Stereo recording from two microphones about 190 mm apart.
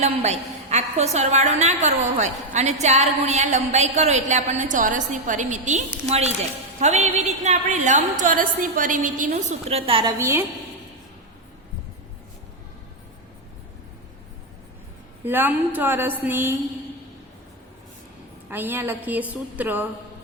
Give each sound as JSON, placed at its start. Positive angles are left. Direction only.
{"t": 0.0, "sound": "a woman's voice", "side_deg": -35}
{"t": 10.2, "sound": "a woman's voice", "side_deg": -15}
{"t": 15.2, "sound": "a woman's voice", "side_deg": -10}
{"t": 18.5, "sound": "a woman's voice", "side_deg": -10}